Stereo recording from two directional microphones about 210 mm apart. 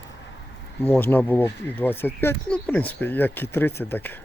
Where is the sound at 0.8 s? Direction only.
10° left (ahead or behind).